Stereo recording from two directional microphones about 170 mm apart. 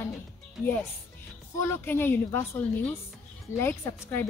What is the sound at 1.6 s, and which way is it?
Speech, 15° left (ahead or behind).